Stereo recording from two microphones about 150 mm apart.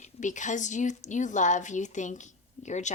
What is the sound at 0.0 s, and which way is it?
A woman's voice, 55° left (ahead or behind).